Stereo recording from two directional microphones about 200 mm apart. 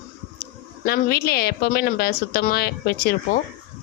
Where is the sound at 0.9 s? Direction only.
50° left (ahead or behind).